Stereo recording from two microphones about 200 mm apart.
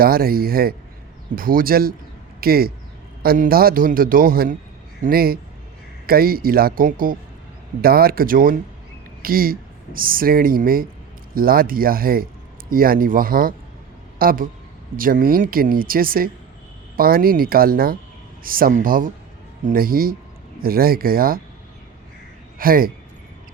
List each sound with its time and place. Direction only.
0.0 s speech: 50° right (ahead or behind)
22.5 s speech: 45° right (ahead or behind)